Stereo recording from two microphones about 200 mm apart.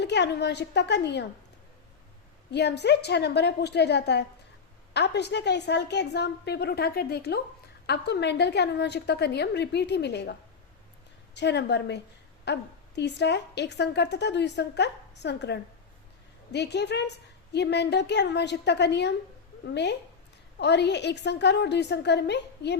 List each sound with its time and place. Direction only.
0.0 s a woman's voice: 60° left (ahead or behind)
2.5 s a woman's voice: 55° left (ahead or behind)
11.3 s a woman's voice: 60° left (ahead or behind)